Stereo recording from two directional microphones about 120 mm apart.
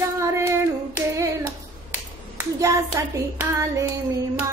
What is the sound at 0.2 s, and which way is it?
Hands, 20° right (ahead or behind).